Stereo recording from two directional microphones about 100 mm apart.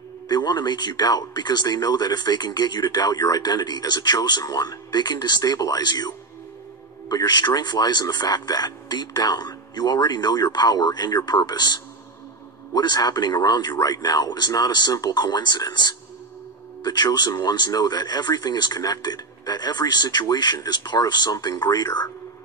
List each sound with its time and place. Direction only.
0.3 s speech: 45° left (ahead or behind)